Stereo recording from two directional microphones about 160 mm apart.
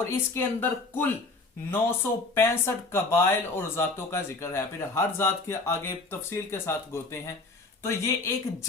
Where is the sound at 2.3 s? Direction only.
15° left (ahead or behind).